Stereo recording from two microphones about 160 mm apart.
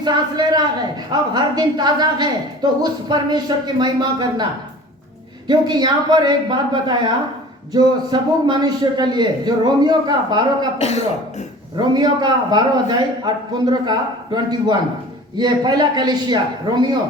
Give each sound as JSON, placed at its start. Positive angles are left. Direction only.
{"t": 0.0, "sound": "a man's voice", "side_deg": -25}
{"t": 5.5, "sound": "a man's voice", "side_deg": -25}
{"t": 10.8, "sound": "speech", "side_deg": 45}
{"t": 11.8, "sound": "a man's voice", "side_deg": -30}